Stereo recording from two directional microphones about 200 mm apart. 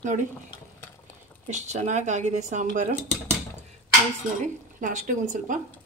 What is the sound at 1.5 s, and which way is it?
Speech, 35° right (ahead or behind).